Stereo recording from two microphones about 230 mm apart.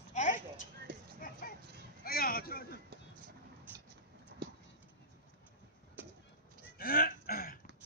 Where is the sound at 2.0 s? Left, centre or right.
Left.